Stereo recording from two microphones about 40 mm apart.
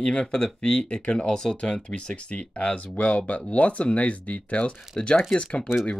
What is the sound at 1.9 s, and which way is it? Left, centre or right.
Speech, left.